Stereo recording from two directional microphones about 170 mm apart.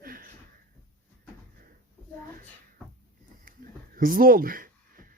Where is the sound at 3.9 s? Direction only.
55° right (ahead or behind).